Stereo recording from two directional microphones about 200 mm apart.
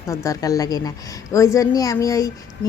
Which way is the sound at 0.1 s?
15° left (ahead or behind).